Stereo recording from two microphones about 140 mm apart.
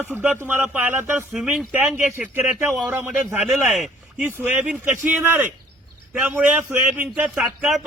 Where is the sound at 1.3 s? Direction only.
Centre (ahead or behind).